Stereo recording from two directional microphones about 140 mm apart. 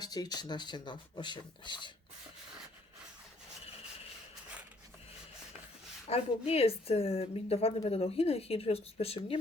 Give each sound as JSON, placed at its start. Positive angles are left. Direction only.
{"t": 0.0, "sound": "speech", "side_deg": 30}
{"t": 6.1, "sound": "speech", "side_deg": 45}